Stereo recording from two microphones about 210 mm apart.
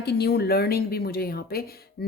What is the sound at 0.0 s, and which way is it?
A woman's voice, 50° left (ahead or behind).